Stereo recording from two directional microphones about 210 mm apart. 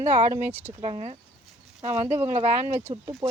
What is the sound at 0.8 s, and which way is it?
Speech, 30° right (ahead or behind).